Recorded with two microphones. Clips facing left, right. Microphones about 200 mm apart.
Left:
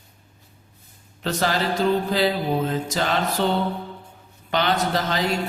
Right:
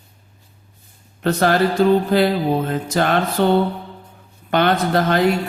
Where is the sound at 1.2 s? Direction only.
55° right (ahead or behind).